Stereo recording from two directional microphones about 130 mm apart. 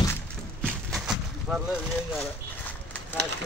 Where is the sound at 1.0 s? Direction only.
5° right (ahead or behind).